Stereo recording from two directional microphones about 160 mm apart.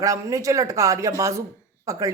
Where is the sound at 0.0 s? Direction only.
20° right (ahead or behind).